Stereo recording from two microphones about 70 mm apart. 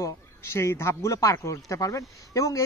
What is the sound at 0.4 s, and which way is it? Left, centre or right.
Speech, left.